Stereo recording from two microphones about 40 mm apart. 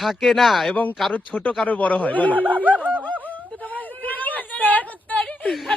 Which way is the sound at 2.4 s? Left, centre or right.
Right.